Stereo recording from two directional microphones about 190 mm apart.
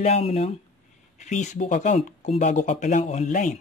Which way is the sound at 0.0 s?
35° left (ahead or behind).